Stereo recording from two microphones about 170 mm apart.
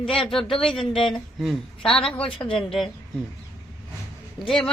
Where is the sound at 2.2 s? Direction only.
30° left (ahead or behind).